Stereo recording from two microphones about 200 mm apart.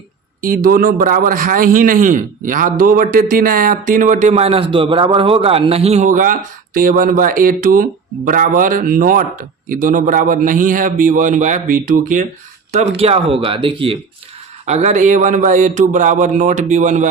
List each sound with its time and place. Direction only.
0.4 s a man's voice: 45° right (ahead or behind)
13.0 s a man's voice: 30° right (ahead or behind)